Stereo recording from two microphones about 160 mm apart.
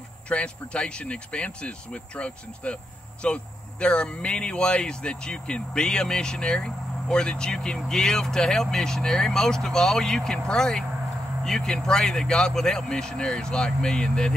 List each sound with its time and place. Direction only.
0.3 s speech: 5° left (ahead or behind)